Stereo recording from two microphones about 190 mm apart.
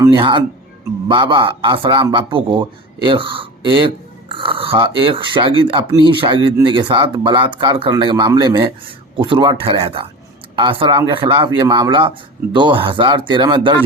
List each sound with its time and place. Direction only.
0.0 s speech: 25° right (ahead or behind)